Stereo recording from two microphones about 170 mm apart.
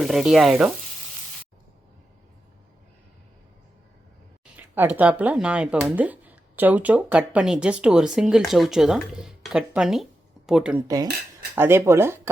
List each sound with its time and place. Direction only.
0.0 s speech: centre (ahead or behind)
4.5 s speech: 10° right (ahead or behind)
10.8 s speech: 20° right (ahead or behind)